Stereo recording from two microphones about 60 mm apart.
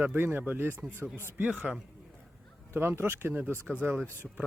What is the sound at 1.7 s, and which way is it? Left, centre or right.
Speech, centre.